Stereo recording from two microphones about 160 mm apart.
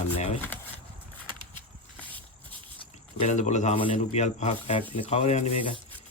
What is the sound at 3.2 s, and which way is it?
Speech, 45° left (ahead or behind).